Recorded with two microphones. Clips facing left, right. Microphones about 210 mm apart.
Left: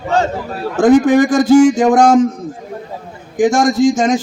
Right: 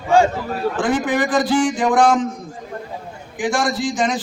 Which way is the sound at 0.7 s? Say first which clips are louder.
Left 12 dB; 45° left (ahead or behind).